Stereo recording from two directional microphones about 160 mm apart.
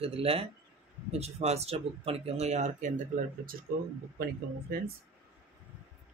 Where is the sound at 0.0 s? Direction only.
35° right (ahead or behind).